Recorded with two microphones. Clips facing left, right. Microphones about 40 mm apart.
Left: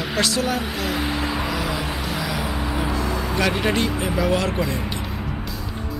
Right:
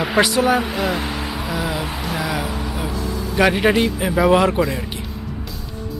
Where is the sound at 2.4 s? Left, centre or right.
Centre.